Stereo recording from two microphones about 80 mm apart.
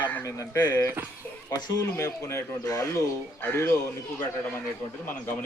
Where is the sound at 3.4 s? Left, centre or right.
Left.